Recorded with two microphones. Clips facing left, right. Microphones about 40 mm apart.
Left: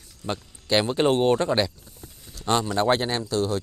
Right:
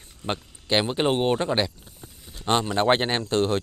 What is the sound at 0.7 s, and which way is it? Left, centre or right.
Speech, centre.